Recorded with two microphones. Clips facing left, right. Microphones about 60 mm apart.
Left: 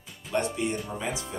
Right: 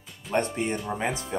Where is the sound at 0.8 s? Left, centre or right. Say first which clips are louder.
Right 4 dB; right.